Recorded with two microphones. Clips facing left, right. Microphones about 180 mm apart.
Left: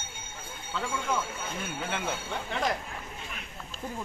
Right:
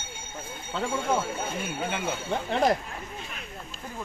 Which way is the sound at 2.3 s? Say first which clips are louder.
Right 9 dB; 35° right (ahead or behind).